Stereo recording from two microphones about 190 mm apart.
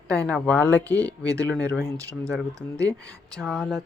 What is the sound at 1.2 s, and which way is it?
Speech, 15° right (ahead or behind).